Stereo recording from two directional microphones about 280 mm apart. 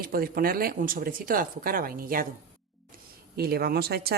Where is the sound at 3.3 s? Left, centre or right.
Right.